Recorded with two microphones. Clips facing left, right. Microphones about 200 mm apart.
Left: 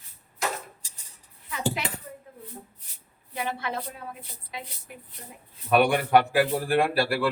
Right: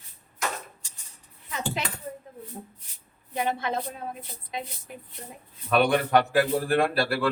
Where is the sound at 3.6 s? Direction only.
25° right (ahead or behind).